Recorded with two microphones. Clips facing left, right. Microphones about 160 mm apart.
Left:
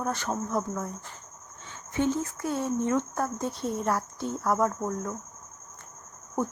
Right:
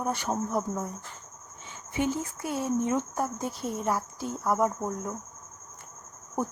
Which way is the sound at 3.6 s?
Centre (ahead or behind).